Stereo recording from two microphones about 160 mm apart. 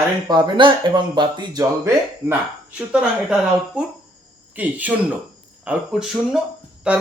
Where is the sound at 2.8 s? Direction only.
5° right (ahead or behind).